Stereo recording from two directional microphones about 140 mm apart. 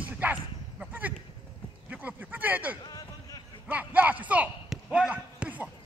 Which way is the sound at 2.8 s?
25° left (ahead or behind).